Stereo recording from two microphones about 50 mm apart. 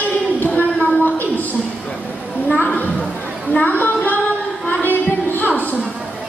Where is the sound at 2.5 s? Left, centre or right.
Left.